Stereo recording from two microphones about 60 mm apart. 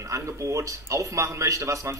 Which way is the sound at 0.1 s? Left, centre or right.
Right.